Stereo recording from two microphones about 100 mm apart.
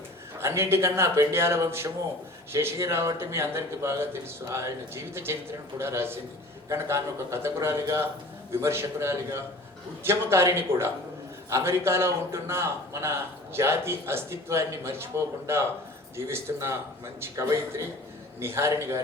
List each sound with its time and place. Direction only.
0.3 s a man's voice: 25° right (ahead or behind)